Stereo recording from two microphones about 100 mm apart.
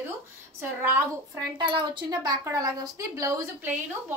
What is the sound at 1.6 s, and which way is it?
Speech, 50° right (ahead or behind).